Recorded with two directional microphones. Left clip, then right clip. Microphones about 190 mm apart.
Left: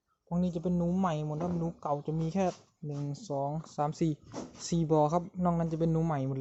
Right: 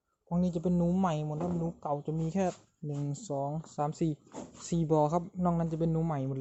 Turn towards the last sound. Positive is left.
turn(degrees=0)  # may be behind; listen again after turning